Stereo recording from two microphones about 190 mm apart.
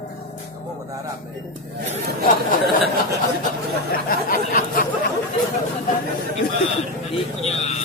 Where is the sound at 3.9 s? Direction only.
50° left (ahead or behind).